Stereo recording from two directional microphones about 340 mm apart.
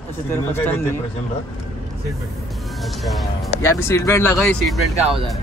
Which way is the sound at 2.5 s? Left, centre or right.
Centre.